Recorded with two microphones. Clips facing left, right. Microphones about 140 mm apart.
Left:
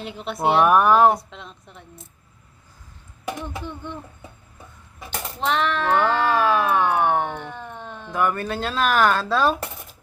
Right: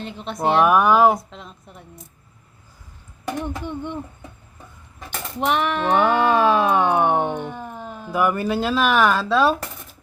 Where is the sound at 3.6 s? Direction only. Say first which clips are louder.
Right 5 dB; 15° right (ahead or behind).